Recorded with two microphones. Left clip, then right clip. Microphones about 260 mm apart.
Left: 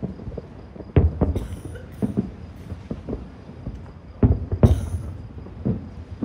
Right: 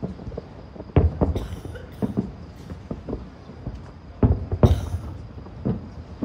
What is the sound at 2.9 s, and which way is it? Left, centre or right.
Vehicle, centre.